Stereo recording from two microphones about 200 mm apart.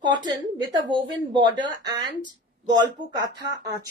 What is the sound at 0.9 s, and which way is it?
Speech, 25° right (ahead or behind).